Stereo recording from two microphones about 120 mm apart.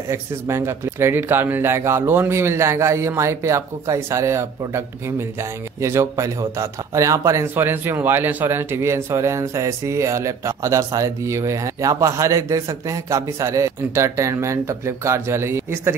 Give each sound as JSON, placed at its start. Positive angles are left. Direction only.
{"t": 0.1, "sound": "speech", "side_deg": -25}